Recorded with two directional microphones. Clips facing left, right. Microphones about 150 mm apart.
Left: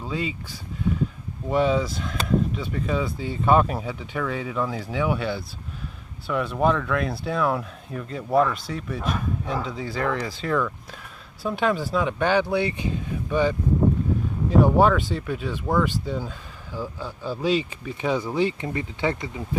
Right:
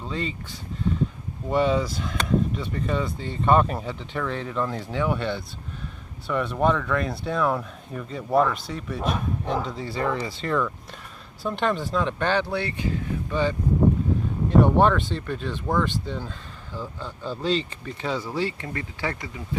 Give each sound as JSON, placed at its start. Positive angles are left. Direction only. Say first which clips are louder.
{"t": 0.0, "sound": "speech", "louder": "left 1 dB", "side_deg": 5}